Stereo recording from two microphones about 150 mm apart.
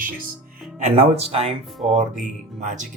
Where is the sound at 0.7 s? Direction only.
45° right (ahead or behind).